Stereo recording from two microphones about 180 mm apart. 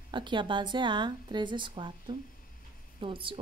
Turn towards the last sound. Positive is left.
turn(degrees=-30)  # may be behind; listen again after turning